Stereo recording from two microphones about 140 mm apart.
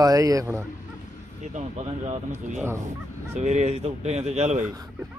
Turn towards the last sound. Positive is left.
turn(degrees=-50)  # may be behind; listen again after turning